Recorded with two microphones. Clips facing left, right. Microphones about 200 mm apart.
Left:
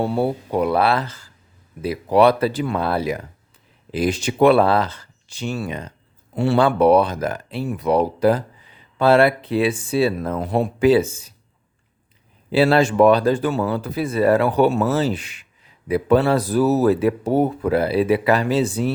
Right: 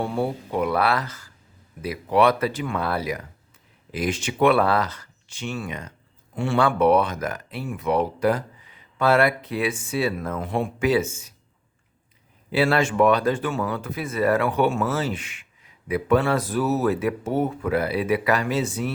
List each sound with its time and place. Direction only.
0.0 s speech: 35° left (ahead or behind)
12.5 s speech: 30° left (ahead or behind)